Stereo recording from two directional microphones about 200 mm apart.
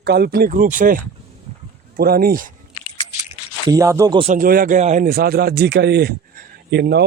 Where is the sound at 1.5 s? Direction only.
35° right (ahead or behind).